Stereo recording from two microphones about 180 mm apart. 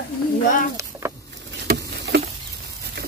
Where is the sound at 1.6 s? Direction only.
70° right (ahead or behind).